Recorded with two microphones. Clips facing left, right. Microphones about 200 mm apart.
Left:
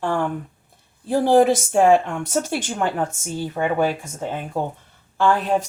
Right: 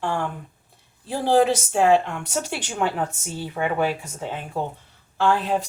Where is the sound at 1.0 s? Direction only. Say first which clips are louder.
Left 4 dB; 55° left (ahead or behind).